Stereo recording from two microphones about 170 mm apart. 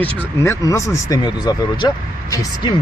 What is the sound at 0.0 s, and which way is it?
Speech, 15° left (ahead or behind).